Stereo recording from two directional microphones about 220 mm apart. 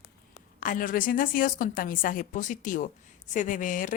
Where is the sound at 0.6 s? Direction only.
40° left (ahead or behind).